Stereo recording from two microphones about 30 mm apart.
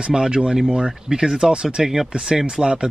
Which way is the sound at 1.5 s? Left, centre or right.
Right.